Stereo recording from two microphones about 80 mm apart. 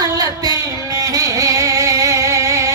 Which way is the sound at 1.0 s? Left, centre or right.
Right.